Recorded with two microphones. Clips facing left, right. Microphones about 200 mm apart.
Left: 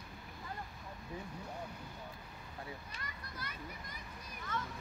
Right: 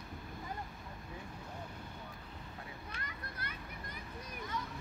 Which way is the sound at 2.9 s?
55° right (ahead or behind).